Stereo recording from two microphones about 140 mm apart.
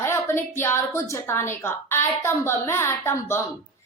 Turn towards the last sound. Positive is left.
turn(degrees=20)  # may be behind; listen again after turning